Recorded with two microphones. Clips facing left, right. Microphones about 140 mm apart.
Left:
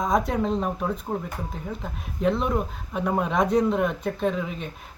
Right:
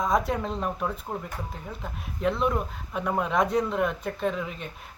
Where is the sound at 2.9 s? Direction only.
20° left (ahead or behind).